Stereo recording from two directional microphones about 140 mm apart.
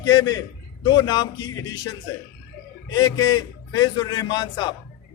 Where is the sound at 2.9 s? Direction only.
30° left (ahead or behind).